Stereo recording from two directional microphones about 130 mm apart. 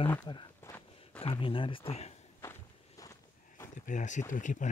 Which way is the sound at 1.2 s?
40° left (ahead or behind).